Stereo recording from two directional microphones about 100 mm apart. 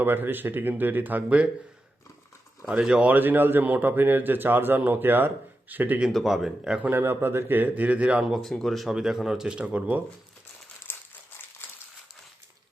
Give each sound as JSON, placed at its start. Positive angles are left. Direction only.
{"t": 0.0, "sound": "speech", "side_deg": -20}
{"t": 2.6, "sound": "speech", "side_deg": -10}
{"t": 6.1, "sound": "speech", "side_deg": 0}
{"t": 6.9, "sound": "speech", "side_deg": -20}
{"t": 8.2, "sound": "speech", "side_deg": 0}